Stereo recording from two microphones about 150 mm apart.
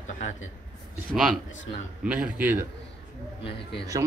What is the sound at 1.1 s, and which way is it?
A man's voice, 5° right (ahead or behind).